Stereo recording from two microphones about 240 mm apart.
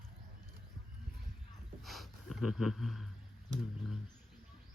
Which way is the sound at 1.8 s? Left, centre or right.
Centre.